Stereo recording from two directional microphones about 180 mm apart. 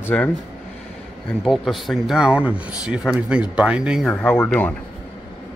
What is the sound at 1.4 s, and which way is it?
Speech, centre (ahead or behind).